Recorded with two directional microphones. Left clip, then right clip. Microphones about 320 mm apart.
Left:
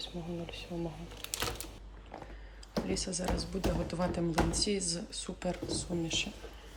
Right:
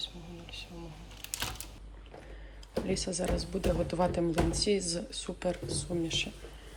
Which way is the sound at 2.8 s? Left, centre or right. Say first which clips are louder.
Right 3 dB; centre.